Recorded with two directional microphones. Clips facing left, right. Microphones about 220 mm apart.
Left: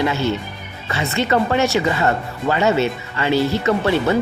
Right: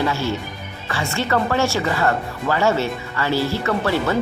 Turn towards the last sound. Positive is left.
turn(degrees=20)  # may be behind; listen again after turning